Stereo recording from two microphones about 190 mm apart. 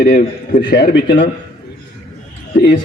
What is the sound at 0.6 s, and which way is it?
Speech, 65° left (ahead or behind).